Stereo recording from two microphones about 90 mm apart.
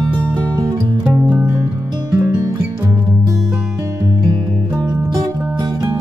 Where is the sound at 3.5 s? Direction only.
40° right (ahead or behind).